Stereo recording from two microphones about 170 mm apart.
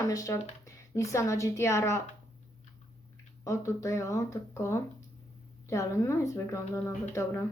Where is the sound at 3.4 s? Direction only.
20° left (ahead or behind).